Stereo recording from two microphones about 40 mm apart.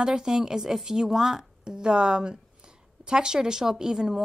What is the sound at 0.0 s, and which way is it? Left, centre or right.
Speech, centre.